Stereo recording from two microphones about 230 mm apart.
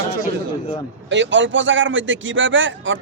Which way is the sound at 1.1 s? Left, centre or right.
Right.